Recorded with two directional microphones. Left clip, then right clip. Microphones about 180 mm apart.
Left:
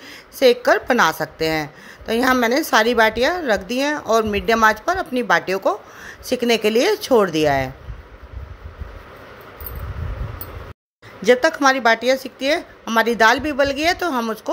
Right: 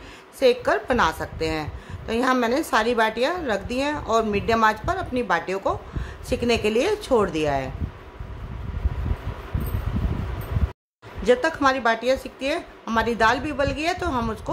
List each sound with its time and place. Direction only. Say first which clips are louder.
0.4 s a woman's voice: left 5 dB; 25° left (ahead or behind)
11.2 s a woman's voice: left 5 dB; 25° left (ahead or behind)